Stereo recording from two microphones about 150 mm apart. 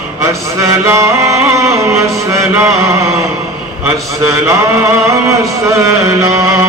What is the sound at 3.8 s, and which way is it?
Speech, 20° right (ahead or behind).